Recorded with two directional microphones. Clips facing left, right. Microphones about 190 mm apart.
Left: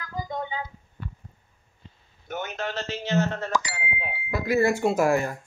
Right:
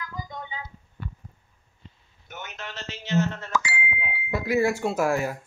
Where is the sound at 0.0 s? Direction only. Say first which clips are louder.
Left 5 dB; 35° left (ahead or behind).